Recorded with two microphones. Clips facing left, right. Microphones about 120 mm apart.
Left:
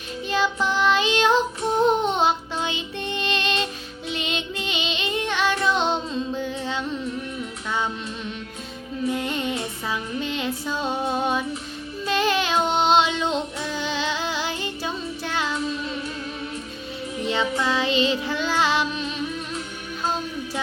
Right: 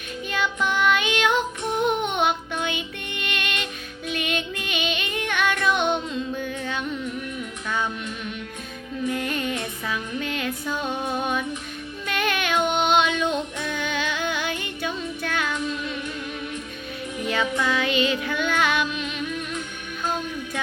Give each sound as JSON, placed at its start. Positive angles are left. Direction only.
{"t": 0.3, "sound": "child singing", "side_deg": 30}
{"t": 1.8, "sound": "music", "side_deg": 35}
{"t": 4.1, "sound": "child singing", "side_deg": 25}
{"t": 9.0, "sound": "music", "side_deg": 25}
{"t": 12.0, "sound": "child singing", "side_deg": 25}
{"t": 17.2, "sound": "child singing", "side_deg": 25}